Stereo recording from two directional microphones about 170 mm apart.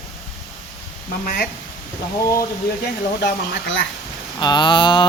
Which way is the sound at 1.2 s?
55° left (ahead or behind).